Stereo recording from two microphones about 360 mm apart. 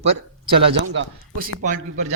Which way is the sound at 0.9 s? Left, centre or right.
Right.